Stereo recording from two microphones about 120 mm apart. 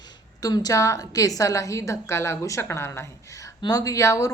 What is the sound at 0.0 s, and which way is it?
A woman's voice, 35° left (ahead or behind).